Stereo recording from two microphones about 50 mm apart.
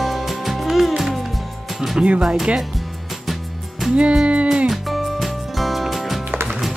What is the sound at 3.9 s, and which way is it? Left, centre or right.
Speech, centre.